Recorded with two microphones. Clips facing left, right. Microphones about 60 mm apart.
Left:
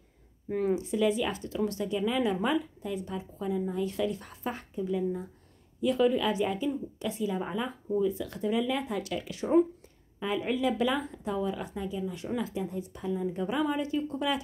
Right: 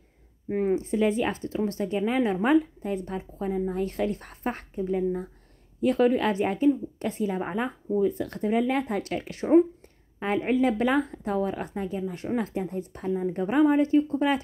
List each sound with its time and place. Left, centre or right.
0.5 s a woman's voice: right